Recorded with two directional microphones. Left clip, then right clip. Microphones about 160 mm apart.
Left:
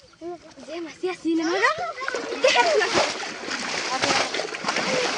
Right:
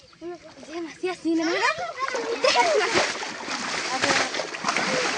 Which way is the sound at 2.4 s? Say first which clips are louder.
Left 2 dB; 20° left (ahead or behind).